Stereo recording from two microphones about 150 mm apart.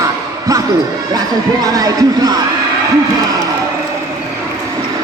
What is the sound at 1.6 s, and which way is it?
Music, 25° right (ahead or behind).